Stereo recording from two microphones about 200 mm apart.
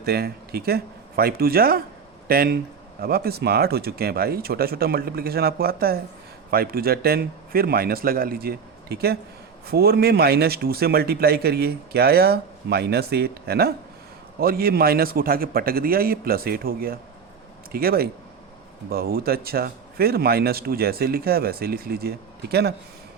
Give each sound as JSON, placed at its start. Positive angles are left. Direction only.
{"t": 0.0, "sound": "speech", "side_deg": -50}